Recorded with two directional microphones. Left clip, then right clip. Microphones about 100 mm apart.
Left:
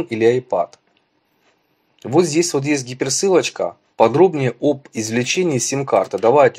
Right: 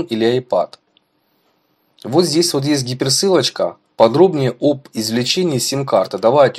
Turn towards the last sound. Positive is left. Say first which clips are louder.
# right 1 dB
turn(degrees=-35)  # may be behind; listen again after turning